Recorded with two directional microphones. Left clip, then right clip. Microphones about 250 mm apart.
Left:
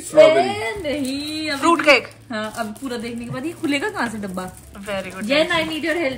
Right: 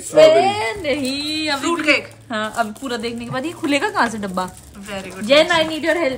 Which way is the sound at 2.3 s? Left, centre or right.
Right.